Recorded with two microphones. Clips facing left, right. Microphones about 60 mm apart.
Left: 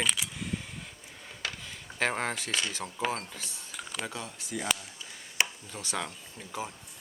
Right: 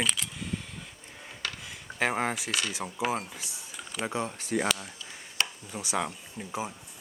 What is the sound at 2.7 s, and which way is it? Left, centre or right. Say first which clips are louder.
Speech: right 2 dB; centre.